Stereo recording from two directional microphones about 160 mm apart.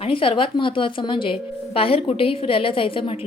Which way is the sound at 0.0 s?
35° left (ahead or behind).